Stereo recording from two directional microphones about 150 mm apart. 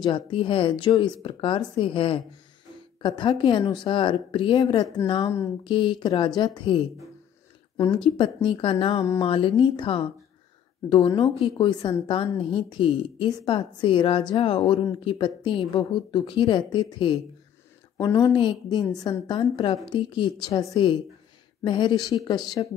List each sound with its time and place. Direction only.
0.0 s a woman's voice: 35° left (ahead or behind)
7.9 s a woman's voice: 35° left (ahead or behind)